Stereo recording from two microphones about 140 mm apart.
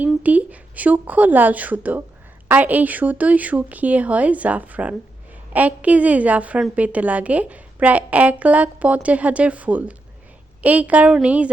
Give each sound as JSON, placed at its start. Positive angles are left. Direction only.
{"t": 0.0, "sound": "a woman's voice", "side_deg": -10}